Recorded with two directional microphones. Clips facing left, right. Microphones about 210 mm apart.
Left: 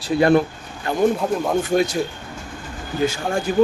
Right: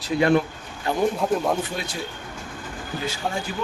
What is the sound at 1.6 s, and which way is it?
Speech, 45° left (ahead or behind).